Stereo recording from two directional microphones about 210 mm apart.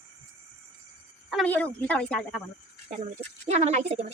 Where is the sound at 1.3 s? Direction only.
5° left (ahead or behind).